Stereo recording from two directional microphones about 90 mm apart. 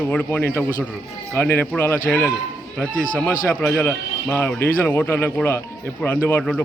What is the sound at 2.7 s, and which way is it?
A man's voice, 10° left (ahead or behind).